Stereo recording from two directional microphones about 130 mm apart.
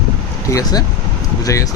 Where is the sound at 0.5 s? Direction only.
30° left (ahead or behind).